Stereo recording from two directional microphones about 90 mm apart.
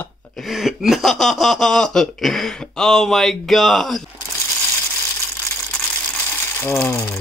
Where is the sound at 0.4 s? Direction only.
5° right (ahead or behind).